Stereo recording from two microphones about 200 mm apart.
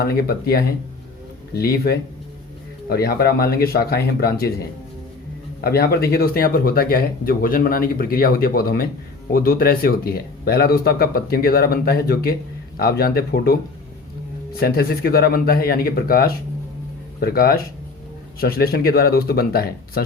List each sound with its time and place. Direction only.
0.0 s speech: 50° left (ahead or behind)
5.6 s speech: 50° left (ahead or behind)